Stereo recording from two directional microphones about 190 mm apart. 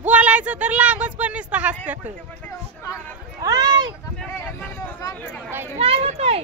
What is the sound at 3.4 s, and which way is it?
Speech, 20° right (ahead or behind).